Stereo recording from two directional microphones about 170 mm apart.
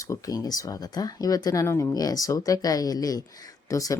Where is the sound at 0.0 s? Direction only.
20° left (ahead or behind).